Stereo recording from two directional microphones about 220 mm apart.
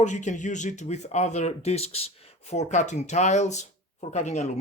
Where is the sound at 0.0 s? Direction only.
35° left (ahead or behind).